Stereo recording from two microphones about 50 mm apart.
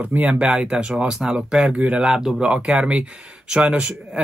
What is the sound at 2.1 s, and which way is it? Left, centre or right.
Speech, centre.